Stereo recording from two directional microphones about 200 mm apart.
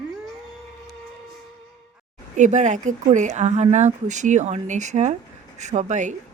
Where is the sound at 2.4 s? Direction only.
35° right (ahead or behind).